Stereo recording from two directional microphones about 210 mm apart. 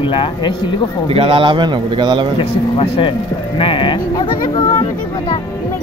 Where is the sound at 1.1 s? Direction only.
25° right (ahead or behind).